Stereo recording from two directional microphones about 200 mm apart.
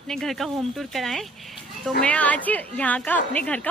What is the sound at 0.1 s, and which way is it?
A woman's voice, centre (ahead or behind).